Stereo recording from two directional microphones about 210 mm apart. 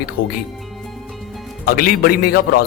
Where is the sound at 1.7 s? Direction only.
45° left (ahead or behind).